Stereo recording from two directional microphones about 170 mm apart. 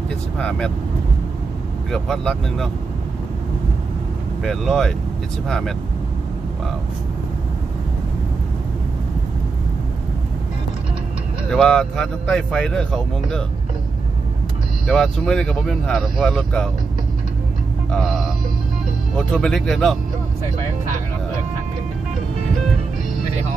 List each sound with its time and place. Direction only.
0.4 s speech: 5° left (ahead or behind)
1.9 s speech: centre (ahead or behind)
4.4 s speech: centre (ahead or behind)
11.5 s speech: 5° left (ahead or behind)
14.9 s speech: 5° left (ahead or behind)
17.9 s music: centre (ahead or behind)
19.1 s speech: 5° left (ahead or behind)